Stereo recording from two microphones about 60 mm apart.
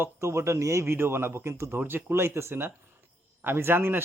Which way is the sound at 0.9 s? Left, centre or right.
Right.